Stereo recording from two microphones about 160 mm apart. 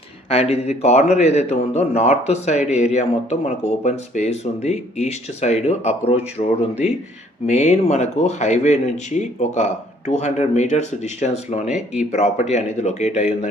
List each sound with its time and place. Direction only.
0.3 s a man's voice: 40° left (ahead or behind)